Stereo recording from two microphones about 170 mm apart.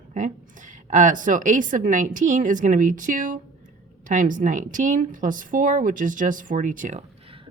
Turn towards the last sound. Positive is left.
turn(degrees=-50)  # may be behind; listen again after turning